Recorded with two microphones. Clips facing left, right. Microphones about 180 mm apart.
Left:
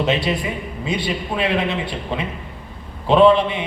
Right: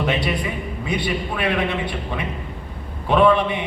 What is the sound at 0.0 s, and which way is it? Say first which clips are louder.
A man's voice: left 2 dB; 25° left (ahead or behind).